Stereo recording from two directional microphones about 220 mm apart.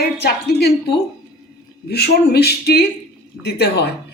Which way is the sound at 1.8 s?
45° left (ahead or behind).